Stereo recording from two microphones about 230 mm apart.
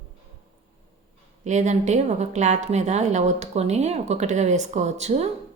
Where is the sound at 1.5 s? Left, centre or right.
Right.